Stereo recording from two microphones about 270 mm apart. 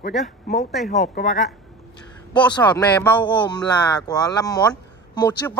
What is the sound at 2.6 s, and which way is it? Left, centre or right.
Speech, centre.